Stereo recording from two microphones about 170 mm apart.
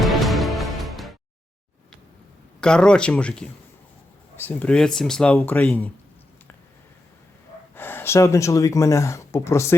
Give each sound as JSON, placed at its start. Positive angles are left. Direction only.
{"t": 0.0, "sound": "music", "side_deg": 0}
{"t": 2.6, "sound": "speech", "side_deg": 5}
{"t": 7.8, "sound": "speech", "side_deg": 10}